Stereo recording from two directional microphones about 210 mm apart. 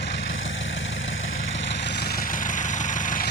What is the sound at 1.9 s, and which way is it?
Vehicle, 45° left (ahead or behind).